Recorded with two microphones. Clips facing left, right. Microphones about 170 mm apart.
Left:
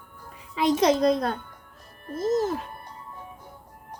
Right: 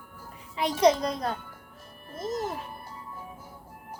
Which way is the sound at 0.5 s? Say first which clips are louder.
Left 1 dB; 90° left.